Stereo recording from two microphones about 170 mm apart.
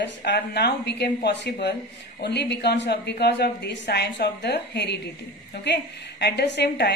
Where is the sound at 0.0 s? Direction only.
80° left.